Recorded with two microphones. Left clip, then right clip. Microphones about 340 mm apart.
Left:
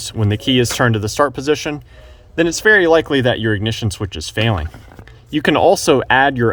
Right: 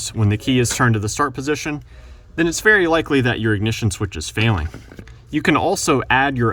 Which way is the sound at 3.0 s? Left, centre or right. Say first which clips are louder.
Left 3 dB; left.